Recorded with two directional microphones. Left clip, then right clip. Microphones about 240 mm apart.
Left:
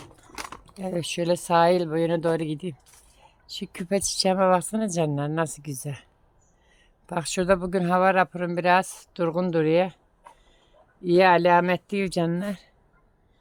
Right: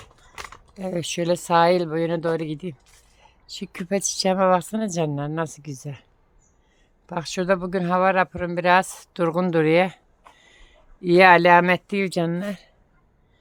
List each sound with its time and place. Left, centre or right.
0.8 s a woman's voice: centre
7.1 s speech: centre